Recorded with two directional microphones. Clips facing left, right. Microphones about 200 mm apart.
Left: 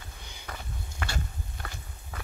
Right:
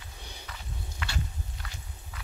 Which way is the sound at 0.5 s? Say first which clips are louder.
Left 6 dB; 45° left (ahead or behind).